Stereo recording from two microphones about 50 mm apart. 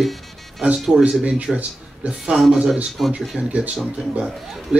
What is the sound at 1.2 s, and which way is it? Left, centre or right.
Speech, right.